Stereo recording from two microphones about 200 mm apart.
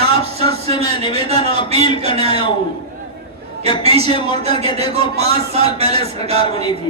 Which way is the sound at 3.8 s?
30° right (ahead or behind).